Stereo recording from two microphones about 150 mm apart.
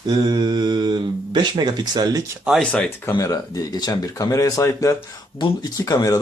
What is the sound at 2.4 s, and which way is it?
Speech, centre (ahead or behind).